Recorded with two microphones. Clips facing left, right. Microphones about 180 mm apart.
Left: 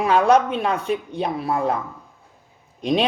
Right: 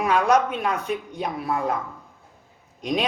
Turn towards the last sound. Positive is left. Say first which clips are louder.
# left 5 dB
turn(degrees=30)  # may be behind; listen again after turning